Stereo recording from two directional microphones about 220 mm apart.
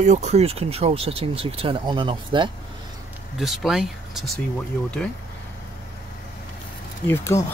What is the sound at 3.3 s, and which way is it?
Speech, centre (ahead or behind).